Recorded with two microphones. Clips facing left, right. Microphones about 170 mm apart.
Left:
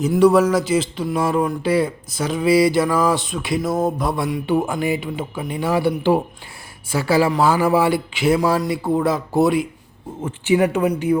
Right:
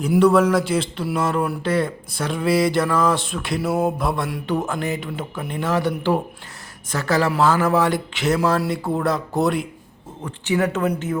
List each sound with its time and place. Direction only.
0.2 s speech: 10° left (ahead or behind)
10.2 s speech: 15° left (ahead or behind)